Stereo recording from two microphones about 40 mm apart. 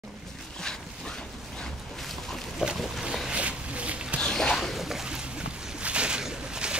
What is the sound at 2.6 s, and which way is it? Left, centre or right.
Boat, right.